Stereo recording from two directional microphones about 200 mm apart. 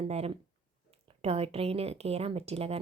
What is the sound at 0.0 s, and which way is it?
Speech, 30° right (ahead or behind).